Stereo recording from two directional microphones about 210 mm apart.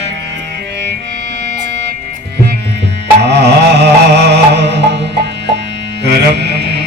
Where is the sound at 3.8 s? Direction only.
55° right (ahead or behind).